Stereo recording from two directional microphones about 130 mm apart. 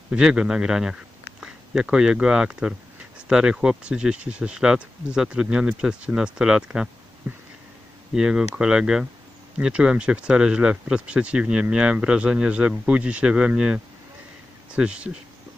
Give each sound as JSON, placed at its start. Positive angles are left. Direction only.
{"t": 0.1, "sound": "a man's voice", "side_deg": -5}